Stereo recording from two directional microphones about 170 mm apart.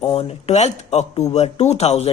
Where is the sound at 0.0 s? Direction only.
40° left (ahead or behind).